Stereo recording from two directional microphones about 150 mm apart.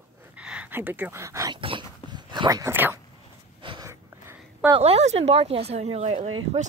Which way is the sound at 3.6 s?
35° right (ahead or behind).